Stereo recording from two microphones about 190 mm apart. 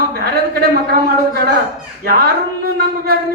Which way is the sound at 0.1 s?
55° right (ahead or behind).